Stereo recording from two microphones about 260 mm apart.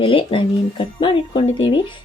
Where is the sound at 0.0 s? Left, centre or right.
Centre.